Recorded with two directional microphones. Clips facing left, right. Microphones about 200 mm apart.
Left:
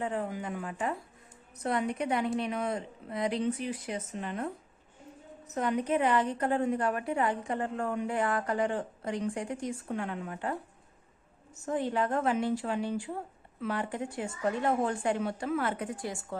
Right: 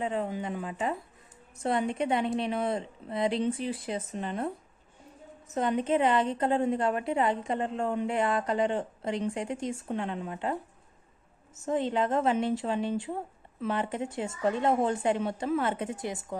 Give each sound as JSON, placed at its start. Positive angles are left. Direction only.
{"t": 0.0, "sound": "a woman's voice", "side_deg": -20}
{"t": 5.5, "sound": "a woman's voice", "side_deg": -25}